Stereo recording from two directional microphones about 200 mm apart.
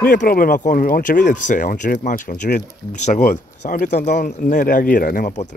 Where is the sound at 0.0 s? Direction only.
45° left (ahead or behind).